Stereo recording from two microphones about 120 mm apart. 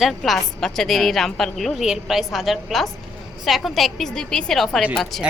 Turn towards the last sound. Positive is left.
turn(degrees=0)  # may be behind; listen again after turning